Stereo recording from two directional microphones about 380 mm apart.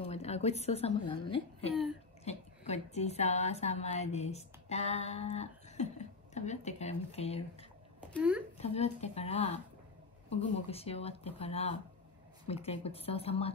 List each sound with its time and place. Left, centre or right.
0.0 s a woman's voice: centre
8.0 s speech: centre
8.5 s speech: centre